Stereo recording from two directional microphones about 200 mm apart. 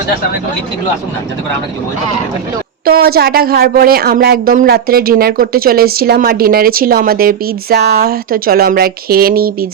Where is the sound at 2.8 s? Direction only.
50° right (ahead or behind).